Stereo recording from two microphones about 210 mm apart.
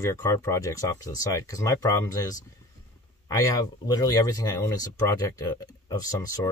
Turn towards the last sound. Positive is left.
turn(degrees=15)  # may be behind; listen again after turning